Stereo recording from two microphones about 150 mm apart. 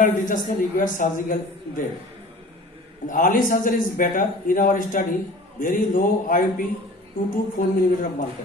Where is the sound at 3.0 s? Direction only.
65° left (ahead or behind).